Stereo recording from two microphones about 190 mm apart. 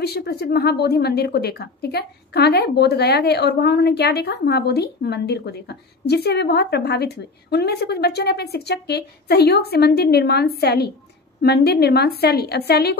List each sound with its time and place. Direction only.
0.0 s speech: 55° left (ahead or behind)